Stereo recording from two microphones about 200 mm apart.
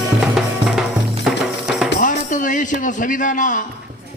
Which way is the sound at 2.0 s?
40° left (ahead or behind).